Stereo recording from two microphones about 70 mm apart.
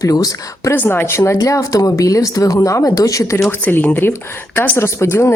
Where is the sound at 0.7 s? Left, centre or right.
Left.